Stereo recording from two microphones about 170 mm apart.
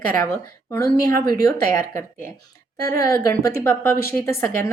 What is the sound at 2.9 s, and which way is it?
Speech, 20° left (ahead or behind).